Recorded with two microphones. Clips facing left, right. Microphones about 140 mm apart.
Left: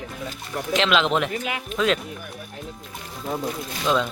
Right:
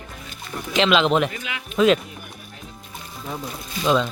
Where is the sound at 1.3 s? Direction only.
45° left (ahead or behind).